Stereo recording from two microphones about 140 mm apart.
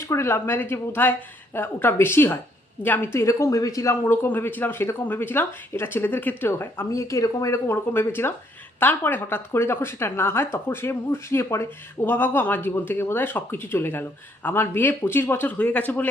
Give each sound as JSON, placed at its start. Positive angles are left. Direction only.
{"t": 0.1, "sound": "speech", "side_deg": 20}